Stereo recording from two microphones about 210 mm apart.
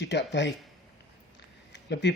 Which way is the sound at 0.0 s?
55° left (ahead or behind).